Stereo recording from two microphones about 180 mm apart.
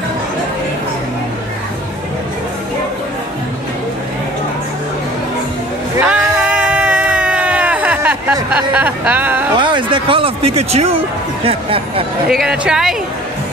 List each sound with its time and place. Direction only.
5.9 s a sound: 5° right (ahead or behind)
9.6 s speech: 25° right (ahead or behind)
12.3 s speech: 5° right (ahead or behind)